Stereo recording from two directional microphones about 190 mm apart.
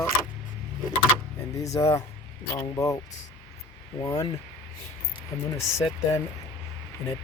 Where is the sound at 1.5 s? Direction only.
15° left (ahead or behind).